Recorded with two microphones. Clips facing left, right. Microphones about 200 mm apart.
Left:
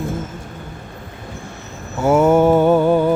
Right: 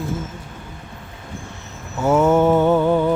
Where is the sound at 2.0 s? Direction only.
10° left (ahead or behind).